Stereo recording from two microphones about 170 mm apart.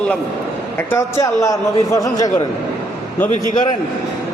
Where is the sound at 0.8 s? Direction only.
15° left (ahead or behind).